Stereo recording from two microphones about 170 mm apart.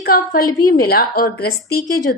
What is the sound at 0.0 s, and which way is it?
A woman's voice, 60° left (ahead or behind).